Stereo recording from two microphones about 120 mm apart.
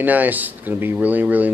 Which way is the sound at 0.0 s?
15° right (ahead or behind).